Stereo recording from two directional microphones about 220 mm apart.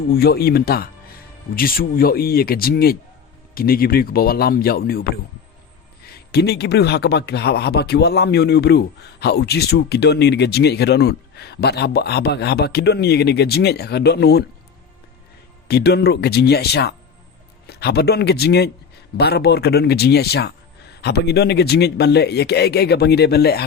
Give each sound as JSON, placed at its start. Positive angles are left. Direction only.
{"t": 0.1, "sound": "speech", "side_deg": 45}
{"t": 15.6, "sound": "speech", "side_deg": 45}